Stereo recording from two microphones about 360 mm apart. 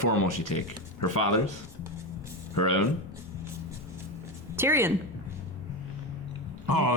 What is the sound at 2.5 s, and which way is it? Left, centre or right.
Speech, left.